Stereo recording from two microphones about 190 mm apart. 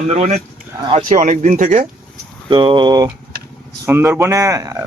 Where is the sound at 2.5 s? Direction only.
25° right (ahead or behind).